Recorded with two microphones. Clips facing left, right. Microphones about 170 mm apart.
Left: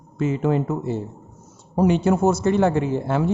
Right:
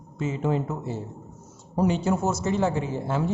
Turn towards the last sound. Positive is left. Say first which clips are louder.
# left 5 dB
turn(degrees=65)  # may be behind; listen again after turning